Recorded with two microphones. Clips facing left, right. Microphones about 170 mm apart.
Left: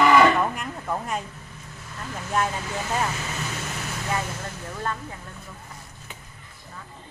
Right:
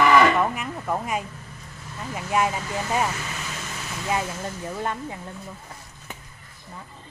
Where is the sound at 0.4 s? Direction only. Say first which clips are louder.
Right 2 dB; 10° right (ahead or behind).